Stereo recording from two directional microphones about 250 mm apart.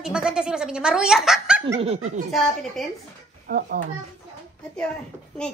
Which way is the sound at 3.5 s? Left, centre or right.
Right.